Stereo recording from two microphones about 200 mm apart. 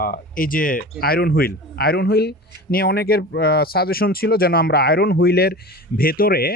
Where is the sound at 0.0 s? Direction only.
45° left (ahead or behind).